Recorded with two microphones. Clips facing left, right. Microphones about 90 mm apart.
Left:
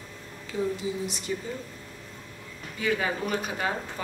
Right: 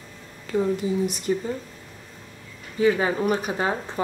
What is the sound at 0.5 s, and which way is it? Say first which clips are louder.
Speech: right 6 dB; 50° right (ahead or behind).